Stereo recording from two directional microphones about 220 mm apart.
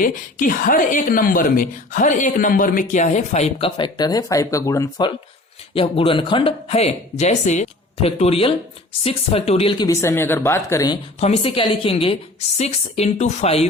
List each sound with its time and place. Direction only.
0.0 s speech: 40° left (ahead or behind); by 10.9 s 15° left (ahead or behind)
11.2 s speech: 25° left (ahead or behind)